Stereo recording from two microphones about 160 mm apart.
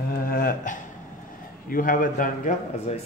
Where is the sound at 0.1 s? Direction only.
65° left (ahead or behind).